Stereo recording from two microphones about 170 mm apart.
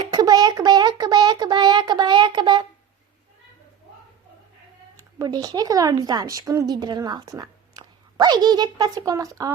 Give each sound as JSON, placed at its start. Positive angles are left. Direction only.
{"t": 0.0, "sound": "speech", "side_deg": -25}
{"t": 4.9, "sound": "speech", "side_deg": -20}